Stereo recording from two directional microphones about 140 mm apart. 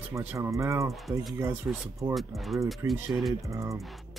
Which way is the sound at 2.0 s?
25° right (ahead or behind).